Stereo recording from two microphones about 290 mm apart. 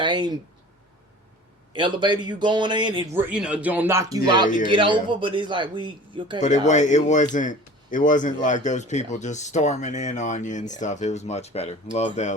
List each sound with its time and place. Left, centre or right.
0.0 s speech: centre
1.7 s speech: centre
3.3 s speech: centre
6.4 s speech: left